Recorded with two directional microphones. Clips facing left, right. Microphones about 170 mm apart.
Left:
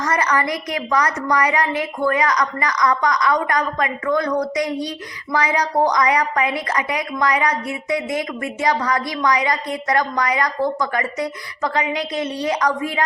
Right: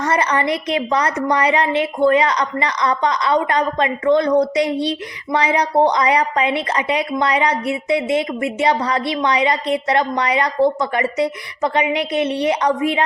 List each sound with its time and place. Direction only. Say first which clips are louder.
0.0 s a woman's voice: right 2 dB; 30° right (ahead or behind)